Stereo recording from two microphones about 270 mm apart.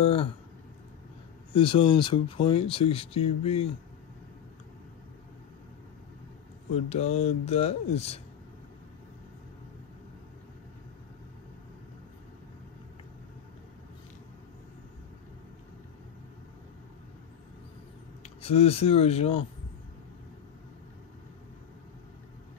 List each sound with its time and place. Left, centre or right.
0.0 s speech: left
1.5 s speech: centre
6.7 s speech: left
18.2 s speech: left